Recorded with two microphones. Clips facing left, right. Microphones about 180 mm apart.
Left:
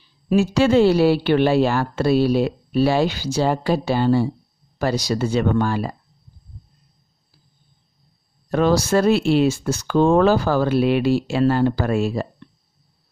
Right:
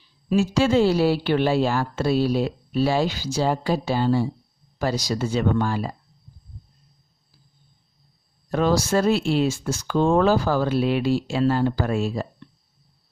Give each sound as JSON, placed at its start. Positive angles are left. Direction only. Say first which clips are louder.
{"t": 0.3, "sound": "speech", "louder": "left 3 dB", "side_deg": 65}
{"t": 8.5, "sound": "speech", "louder": "left 3 dB", "side_deg": 65}